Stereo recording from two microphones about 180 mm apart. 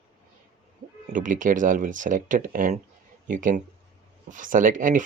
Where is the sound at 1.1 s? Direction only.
45° right (ahead or behind).